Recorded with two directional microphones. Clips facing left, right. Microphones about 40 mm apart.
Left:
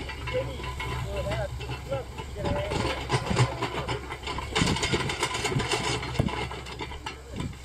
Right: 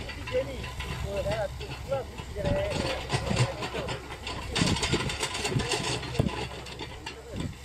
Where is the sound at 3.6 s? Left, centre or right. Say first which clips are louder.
Left 2 dB; left.